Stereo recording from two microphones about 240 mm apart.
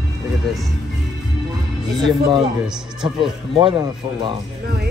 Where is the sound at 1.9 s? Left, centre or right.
Centre.